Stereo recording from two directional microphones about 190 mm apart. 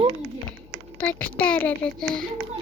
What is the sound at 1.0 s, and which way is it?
A woman's voice, 5° left (ahead or behind).